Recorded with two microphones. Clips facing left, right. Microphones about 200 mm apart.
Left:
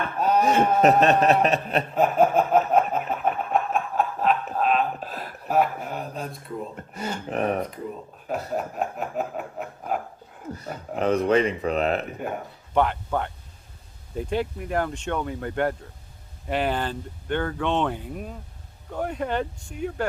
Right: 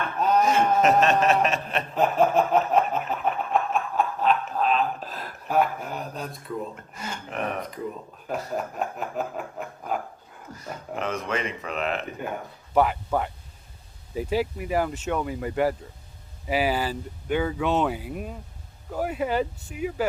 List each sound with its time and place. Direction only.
0.4 s snicker: 35° left (ahead or behind)
2.0 s a sound: 5° left (ahead or behind)
6.9 s snicker: 35° left (ahead or behind)
8.3 s speech: centre (ahead or behind)
10.5 s speech: 35° left (ahead or behind)
12.7 s speech: 5° right (ahead or behind)